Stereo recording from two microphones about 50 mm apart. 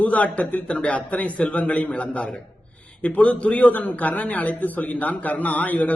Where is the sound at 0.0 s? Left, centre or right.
Left.